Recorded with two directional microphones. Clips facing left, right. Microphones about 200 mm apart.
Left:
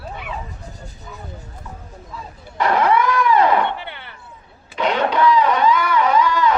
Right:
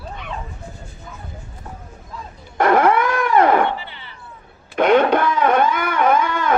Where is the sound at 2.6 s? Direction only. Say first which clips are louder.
Right 2 dB; 50° right (ahead or behind).